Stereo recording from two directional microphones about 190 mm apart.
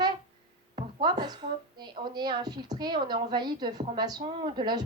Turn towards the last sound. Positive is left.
turn(degrees=-25)  # may be behind; listen again after turning